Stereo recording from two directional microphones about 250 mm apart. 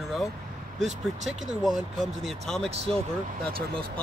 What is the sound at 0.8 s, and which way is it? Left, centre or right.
Speech, centre.